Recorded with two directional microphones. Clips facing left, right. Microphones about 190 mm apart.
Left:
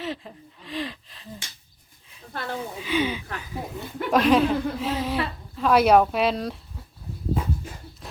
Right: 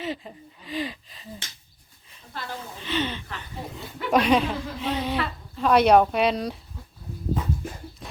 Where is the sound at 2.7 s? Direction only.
10° left (ahead or behind).